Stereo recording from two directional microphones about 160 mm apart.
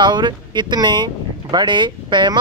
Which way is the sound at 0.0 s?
30° right (ahead or behind).